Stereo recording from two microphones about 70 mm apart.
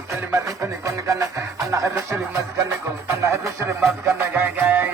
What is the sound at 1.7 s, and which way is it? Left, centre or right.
Music, right.